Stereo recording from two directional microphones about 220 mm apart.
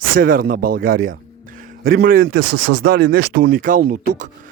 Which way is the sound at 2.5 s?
90° right.